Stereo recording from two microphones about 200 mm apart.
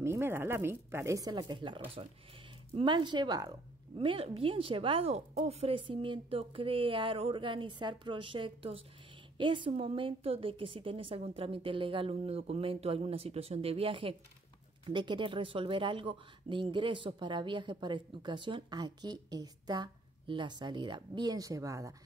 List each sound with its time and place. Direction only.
0.0 s speech: 10° right (ahead or behind)